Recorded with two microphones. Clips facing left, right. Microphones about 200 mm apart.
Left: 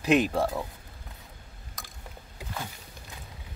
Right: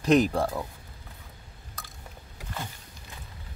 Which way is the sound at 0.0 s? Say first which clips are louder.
Right 2 dB; 5° left (ahead or behind).